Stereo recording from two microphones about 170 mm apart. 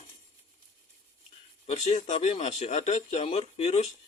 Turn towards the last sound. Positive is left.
turn(degrees=40)  # may be behind; listen again after turning